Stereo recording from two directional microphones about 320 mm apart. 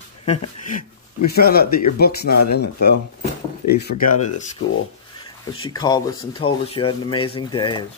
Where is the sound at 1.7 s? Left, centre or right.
Left.